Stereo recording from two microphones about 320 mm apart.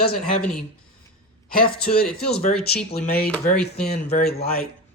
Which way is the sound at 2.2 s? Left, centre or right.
Left.